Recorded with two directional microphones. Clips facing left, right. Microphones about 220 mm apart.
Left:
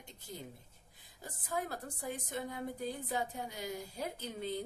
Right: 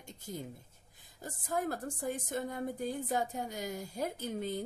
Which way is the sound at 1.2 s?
45° right (ahead or behind).